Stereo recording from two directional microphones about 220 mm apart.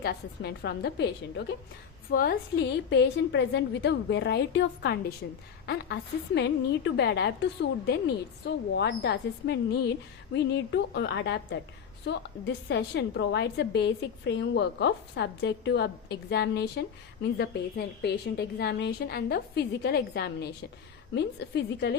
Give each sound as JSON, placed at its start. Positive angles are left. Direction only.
{"t": 0.0, "sound": "a woman's voice", "side_deg": 50}